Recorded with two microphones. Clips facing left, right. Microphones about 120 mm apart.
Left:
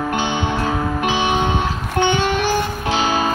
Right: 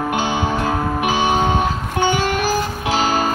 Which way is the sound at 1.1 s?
40° right (ahead or behind).